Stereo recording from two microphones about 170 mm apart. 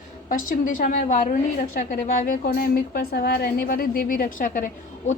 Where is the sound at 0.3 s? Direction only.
55° left (ahead or behind).